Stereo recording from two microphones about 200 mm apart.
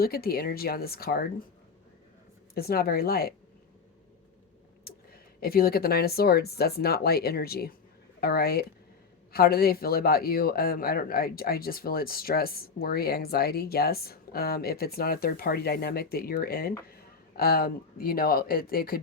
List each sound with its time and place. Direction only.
0.0 s speech: 50° left (ahead or behind)
2.6 s speech: 50° left (ahead or behind)
4.9 s speech: 50° left (ahead or behind)